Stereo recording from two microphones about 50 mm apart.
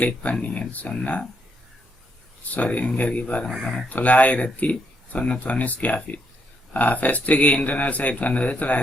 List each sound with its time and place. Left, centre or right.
0.0 s speech: left
2.4 s speech: left